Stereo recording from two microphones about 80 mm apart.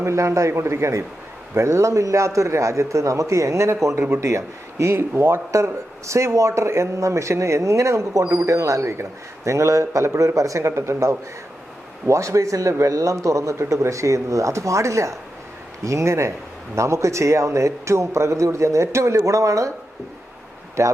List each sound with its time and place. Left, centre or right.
0.0 s speech: right
20.8 s speech: right